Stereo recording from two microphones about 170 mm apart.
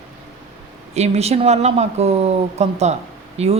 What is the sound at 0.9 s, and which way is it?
A woman's voice, 40° right (ahead or behind).